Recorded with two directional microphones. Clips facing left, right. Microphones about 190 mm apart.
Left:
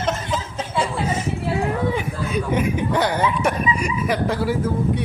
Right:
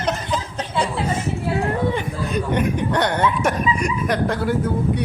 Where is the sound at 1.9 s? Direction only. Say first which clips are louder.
Even; 5° left (ahead or behind).